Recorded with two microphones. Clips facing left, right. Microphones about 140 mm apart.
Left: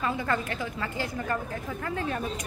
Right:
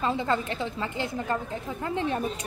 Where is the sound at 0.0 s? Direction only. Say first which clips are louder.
Right 2 dB; 25° right (ahead or behind).